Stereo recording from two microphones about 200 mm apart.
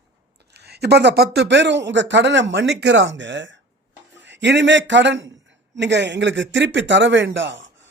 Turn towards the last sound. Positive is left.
turn(degrees=-65)  # may be behind; listen again after turning